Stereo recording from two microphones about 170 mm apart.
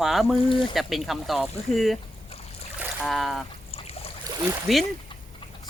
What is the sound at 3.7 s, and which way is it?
Boat, 35° left (ahead or behind).